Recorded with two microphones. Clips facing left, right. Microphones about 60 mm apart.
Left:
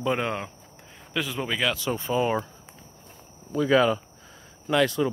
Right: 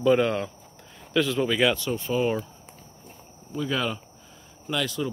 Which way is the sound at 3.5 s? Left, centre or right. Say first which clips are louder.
Left 7 dB; left.